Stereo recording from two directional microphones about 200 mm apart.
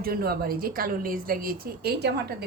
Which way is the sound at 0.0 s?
50° right (ahead or behind).